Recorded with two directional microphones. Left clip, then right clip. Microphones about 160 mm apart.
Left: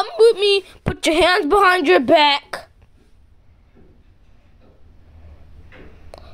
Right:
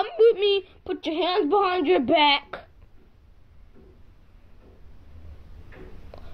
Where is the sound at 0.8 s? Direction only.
55° left (ahead or behind); by 2.7 s 30° left (ahead or behind).